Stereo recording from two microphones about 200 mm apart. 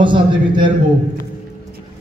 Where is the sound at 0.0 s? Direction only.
25° right (ahead or behind).